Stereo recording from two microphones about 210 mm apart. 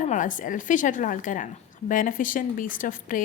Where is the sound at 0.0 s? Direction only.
35° left (ahead or behind).